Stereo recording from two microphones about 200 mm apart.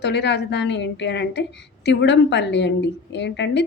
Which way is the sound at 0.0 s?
60° left (ahead or behind).